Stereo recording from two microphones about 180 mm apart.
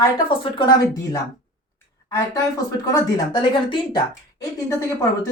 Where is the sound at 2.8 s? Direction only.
20° left (ahead or behind).